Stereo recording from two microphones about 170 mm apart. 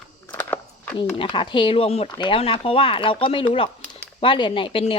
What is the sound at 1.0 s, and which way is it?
Speech, 30° left (ahead or behind).